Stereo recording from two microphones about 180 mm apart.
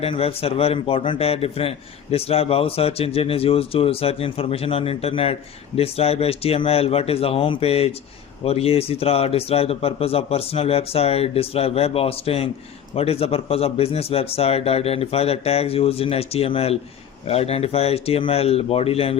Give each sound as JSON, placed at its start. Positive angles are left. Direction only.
{"t": 0.0, "sound": "a man's voice", "side_deg": 35}